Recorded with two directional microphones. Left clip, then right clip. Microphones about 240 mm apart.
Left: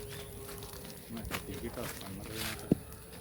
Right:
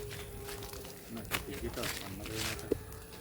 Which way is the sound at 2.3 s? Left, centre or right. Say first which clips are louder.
Right 2 dB; centre.